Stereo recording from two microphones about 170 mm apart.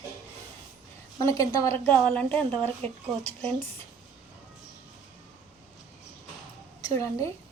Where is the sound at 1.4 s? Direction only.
20° left (ahead or behind).